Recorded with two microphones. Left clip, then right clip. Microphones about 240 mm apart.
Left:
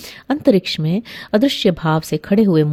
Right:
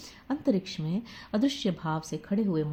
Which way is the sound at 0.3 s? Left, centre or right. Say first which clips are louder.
Left 14 dB; left.